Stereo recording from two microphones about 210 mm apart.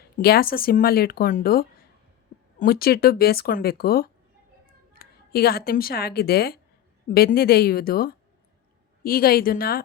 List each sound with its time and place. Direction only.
0.2 s speech: 45° left (ahead or behind)